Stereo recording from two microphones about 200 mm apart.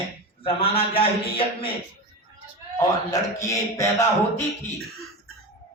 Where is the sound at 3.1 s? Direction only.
15° left (ahead or behind).